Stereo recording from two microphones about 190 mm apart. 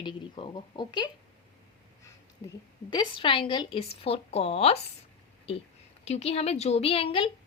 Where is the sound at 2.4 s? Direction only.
20° left (ahead or behind).